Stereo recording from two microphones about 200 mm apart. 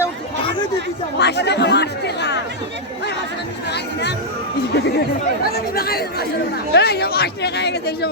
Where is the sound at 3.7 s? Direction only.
60° left (ahead or behind).